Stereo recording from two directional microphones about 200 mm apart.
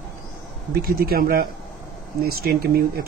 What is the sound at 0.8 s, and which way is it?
Speech, 50° right (ahead or behind).